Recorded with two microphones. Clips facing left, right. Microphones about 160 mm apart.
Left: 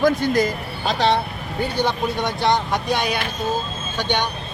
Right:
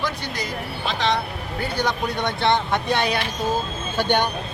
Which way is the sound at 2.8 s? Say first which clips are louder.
Even; 30° right (ahead or behind).